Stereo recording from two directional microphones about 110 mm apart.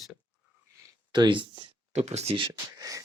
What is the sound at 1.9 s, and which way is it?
Speech, 80° right.